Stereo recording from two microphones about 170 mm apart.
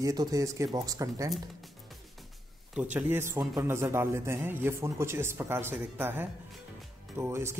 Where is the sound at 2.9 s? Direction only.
10° right (ahead or behind).